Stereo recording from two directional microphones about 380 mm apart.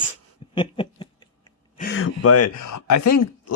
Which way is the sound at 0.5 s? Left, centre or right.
Centre.